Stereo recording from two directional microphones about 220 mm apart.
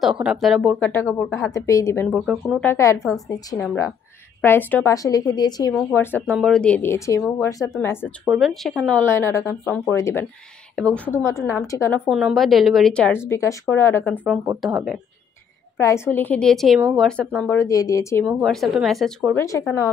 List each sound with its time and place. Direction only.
0.0 s a woman's voice: 5° right (ahead or behind)
2.7 s a woman's voice: 15° left (ahead or behind)
8.3 s a woman's voice: centre (ahead or behind)
12.1 s a woman's voice: centre (ahead or behind)
14.2 s a woman's voice: 5° right (ahead or behind)
15.8 s a woman's voice: 10° left (ahead or behind)
18.2 s a woman's voice: centre (ahead or behind)